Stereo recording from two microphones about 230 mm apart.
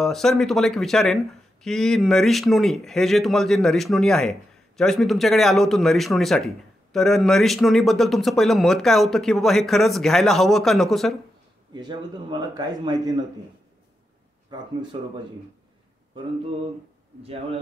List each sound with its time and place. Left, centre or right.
0.0 s speech: centre
11.7 s a man's voice: centre
14.5 s speech: centre
17.2 s speech: right